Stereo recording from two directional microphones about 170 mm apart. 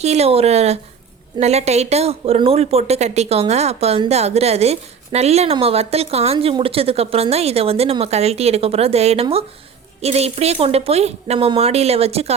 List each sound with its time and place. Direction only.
0.0 s speech: 40° right (ahead or behind)